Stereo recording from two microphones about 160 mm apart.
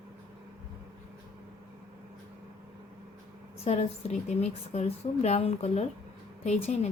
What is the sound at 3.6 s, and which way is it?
A woman's voice, 40° left (ahead or behind).